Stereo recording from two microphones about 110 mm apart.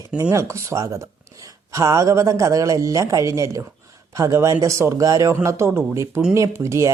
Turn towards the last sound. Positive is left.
turn(degrees=-25)  # may be behind; listen again after turning